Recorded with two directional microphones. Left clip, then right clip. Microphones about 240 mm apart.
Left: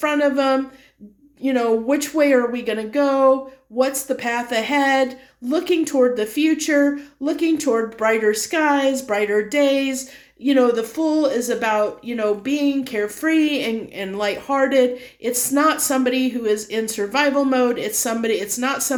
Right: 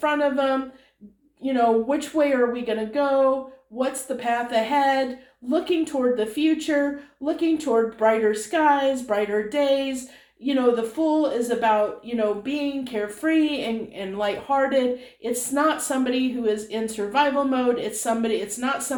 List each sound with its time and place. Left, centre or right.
0.0 s speech: left